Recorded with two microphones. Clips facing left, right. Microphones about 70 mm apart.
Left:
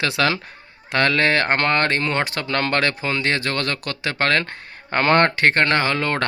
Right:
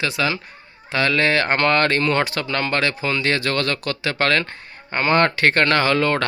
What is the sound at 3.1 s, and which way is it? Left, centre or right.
Speech, left.